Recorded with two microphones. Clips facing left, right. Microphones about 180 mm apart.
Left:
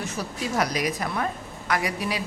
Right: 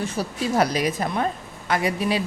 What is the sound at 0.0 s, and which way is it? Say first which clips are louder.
A woman's voice: right 4 dB; 30° right (ahead or behind).